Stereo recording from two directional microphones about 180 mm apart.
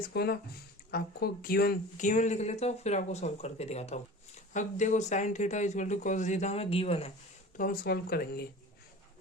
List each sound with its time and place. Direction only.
0.1 s speech: 60° left (ahead or behind); by 7.1 s 35° left (ahead or behind)
7.5 s speech: 50° left (ahead or behind)